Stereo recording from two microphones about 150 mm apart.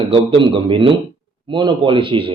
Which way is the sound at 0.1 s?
35° right (ahead or behind).